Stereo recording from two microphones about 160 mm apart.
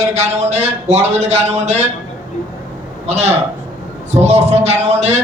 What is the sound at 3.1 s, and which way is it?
A man's voice, 45° right (ahead or behind).